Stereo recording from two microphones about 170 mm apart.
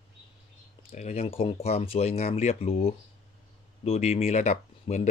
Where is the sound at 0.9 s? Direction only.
40° left (ahead or behind).